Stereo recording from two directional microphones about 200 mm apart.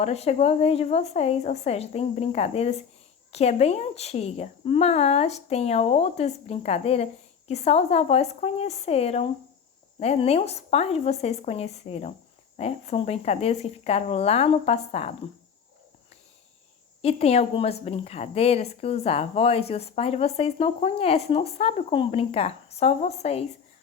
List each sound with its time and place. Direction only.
0.0 s speech: 30° left (ahead or behind)
17.0 s speech: 30° left (ahead or behind)